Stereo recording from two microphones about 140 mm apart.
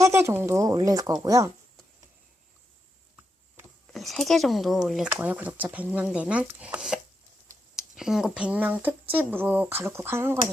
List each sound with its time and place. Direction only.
0.0 s speech: 20° right (ahead or behind)
3.9 s speech: centre (ahead or behind); by 10.3 s 15° right (ahead or behind)